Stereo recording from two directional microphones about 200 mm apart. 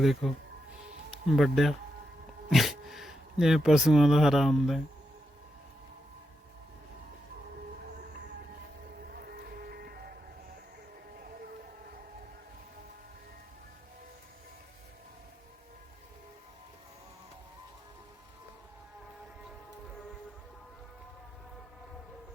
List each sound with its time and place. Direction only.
0.0 s speech: centre (ahead or behind)
1.3 s speech: centre (ahead or behind)
9.0 s cattle: 50° right (ahead or behind)